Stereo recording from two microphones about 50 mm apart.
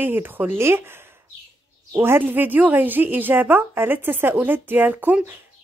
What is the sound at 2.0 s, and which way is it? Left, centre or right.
Speech, right.